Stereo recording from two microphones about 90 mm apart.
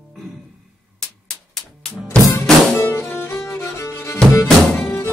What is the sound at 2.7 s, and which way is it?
Music, 30° left (ahead or behind).